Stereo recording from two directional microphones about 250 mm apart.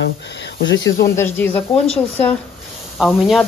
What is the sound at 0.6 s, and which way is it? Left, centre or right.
Speech, left.